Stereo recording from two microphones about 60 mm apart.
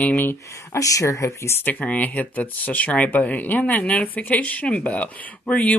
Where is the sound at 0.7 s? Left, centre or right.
Left.